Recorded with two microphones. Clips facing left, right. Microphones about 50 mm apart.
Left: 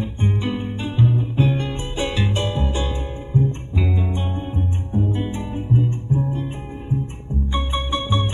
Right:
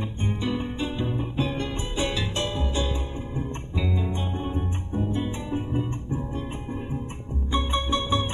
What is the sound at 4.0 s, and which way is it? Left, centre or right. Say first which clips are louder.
Music: left 3 dB; centre.